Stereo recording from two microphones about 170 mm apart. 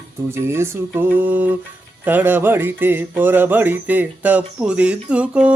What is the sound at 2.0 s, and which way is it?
Music, 10° right (ahead or behind).